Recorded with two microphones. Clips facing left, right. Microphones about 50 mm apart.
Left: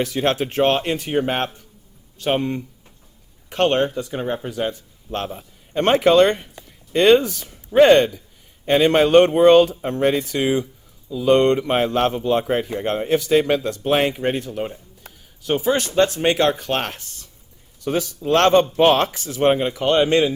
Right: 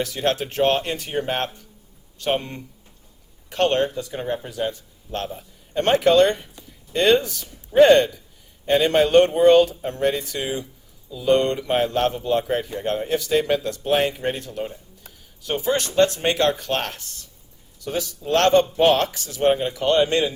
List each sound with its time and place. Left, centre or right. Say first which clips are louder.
0.0 s speech: left 3 dB; left
2.1 s speech: left 3 dB; centre
3.5 s speech: left 2 dB; left
5.7 s speech: left 2 dB; left
14.3 s speech: left 4 dB; left
15.1 s music: left 5 dB; left
15.4 s speech: left 3 dB; centre
17.8 s speech: left 5 dB; left
19.4 s speech: left 2 dB; left